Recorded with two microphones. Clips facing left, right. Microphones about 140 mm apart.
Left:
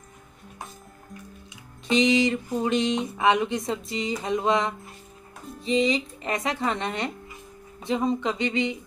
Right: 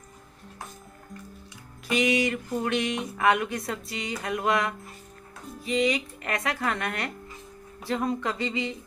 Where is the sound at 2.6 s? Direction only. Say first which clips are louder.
Left 5 dB; 25° left (ahead or behind).